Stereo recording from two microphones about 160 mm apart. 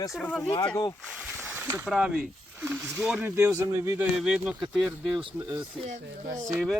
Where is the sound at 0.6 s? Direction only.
20° left (ahead or behind).